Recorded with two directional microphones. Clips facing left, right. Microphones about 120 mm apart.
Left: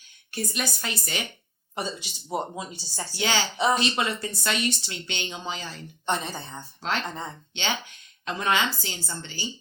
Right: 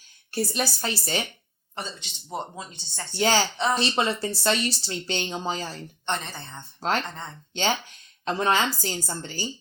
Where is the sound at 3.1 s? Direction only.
40° right (ahead or behind).